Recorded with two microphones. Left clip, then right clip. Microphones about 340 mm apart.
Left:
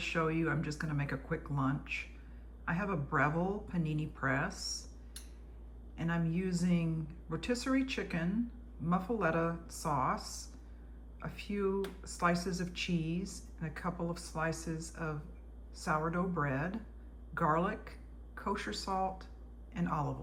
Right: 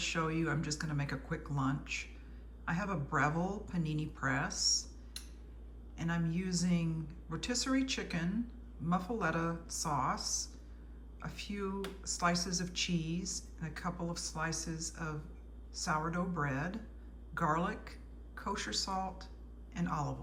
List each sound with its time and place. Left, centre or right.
0.0 s speech: centre